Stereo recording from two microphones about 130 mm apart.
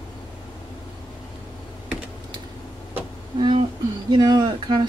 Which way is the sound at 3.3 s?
40° right (ahead or behind).